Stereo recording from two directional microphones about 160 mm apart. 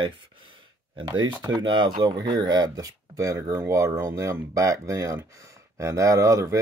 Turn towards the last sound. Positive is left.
turn(degrees=-20)  # may be behind; listen again after turning